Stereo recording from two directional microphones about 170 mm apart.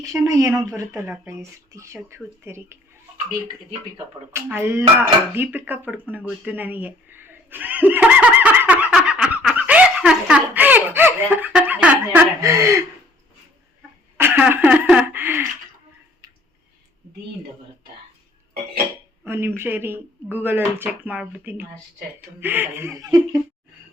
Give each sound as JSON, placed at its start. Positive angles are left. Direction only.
{"t": 0.0, "sound": "speech", "side_deg": -20}
{"t": 4.3, "sound": "speech", "side_deg": -15}
{"t": 14.2, "sound": "speech", "side_deg": -10}
{"t": 19.2, "sound": "speech", "side_deg": -15}